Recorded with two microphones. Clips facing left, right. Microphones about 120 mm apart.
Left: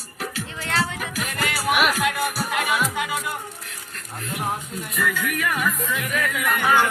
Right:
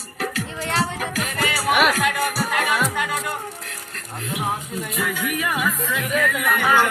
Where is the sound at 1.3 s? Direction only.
Centre (ahead or behind).